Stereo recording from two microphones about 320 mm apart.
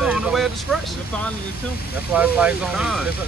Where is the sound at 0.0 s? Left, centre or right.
Centre.